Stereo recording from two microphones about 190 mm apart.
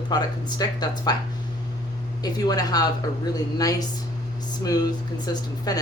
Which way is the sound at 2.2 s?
20° left (ahead or behind).